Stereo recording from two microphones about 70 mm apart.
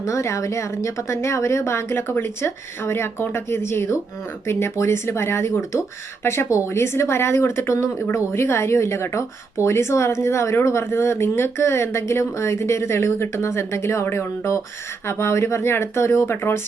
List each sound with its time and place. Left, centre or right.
0.0 s speech: left